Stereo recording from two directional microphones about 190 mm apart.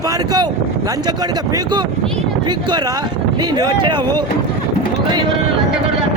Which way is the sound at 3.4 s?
20° right (ahead or behind).